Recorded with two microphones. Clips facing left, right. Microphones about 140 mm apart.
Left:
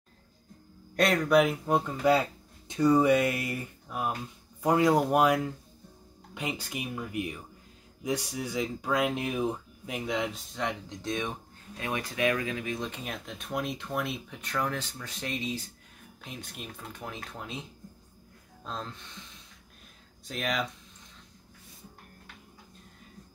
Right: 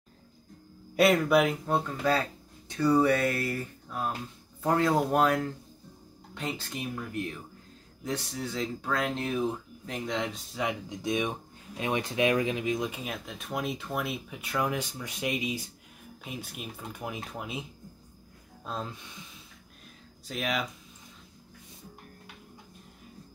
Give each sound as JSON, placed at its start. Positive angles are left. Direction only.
{"t": 0.9, "sound": "speech", "side_deg": -5}
{"t": 1.7, "sound": "speech", "side_deg": 15}
{"t": 20.2, "sound": "speech", "side_deg": 0}